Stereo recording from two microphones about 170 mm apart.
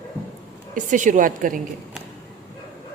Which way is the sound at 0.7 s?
50° right (ahead or behind).